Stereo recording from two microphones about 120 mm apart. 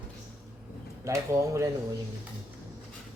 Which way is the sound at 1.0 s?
25° right (ahead or behind).